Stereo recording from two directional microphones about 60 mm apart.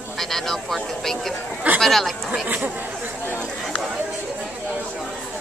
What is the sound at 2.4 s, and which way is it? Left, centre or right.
Speech, right.